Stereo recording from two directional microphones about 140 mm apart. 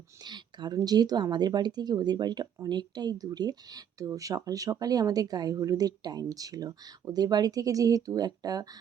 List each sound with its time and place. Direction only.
0.3 s a woman's voice: 30° right (ahead or behind)